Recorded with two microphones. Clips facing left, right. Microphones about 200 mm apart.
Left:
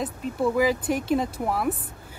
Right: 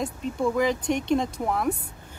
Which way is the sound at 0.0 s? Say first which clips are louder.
Left 1 dB; 5° left (ahead or behind).